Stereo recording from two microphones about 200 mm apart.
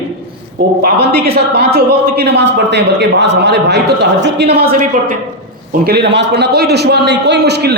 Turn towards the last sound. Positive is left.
turn(degrees=-60)  # may be behind; listen again after turning